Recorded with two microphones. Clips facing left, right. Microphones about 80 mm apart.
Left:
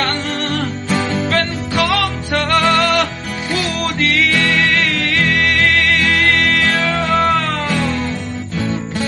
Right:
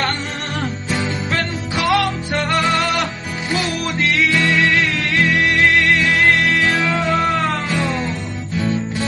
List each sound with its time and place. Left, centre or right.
1.3 s music: centre
2.6 s music: left
4.3 s music: left
4.5 s music: centre